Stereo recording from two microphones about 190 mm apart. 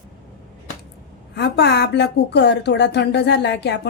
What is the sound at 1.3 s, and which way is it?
Speech, 60° left (ahead or behind).